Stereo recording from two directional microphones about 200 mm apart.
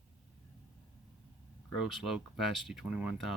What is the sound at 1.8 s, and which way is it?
Speech, centre (ahead or behind).